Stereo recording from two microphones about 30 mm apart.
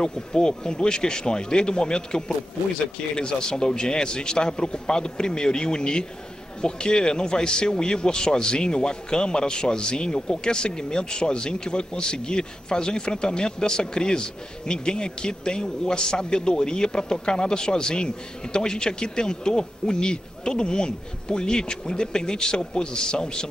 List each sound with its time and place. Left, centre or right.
0.0 s a man's voice: left